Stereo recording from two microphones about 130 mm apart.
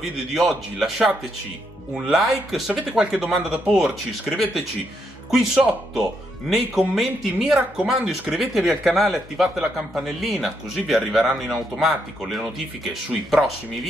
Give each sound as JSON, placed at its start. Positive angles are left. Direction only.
{"t": 0.3, "sound": "speech", "side_deg": 0}
{"t": 5.3, "sound": "speech", "side_deg": -5}